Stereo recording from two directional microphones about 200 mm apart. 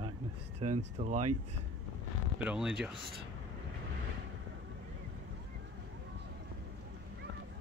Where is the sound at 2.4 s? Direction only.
5° right (ahead or behind).